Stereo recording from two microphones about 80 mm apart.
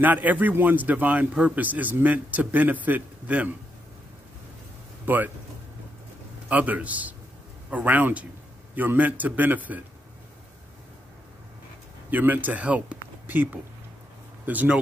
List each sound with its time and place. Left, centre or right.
0.0 s a man's voice: right
5.0 s speech: right
6.5 s a man's voice: centre
12.1 s speech: right